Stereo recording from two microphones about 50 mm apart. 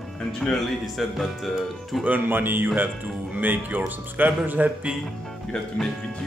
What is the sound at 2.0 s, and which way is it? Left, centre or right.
Speech, right.